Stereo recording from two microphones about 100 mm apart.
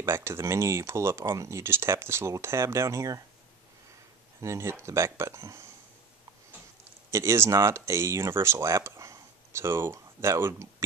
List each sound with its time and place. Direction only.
0.0 s speech: 25° right (ahead or behind)
4.4 s speech: 25° right (ahead or behind)
7.1 s speech: 30° right (ahead or behind)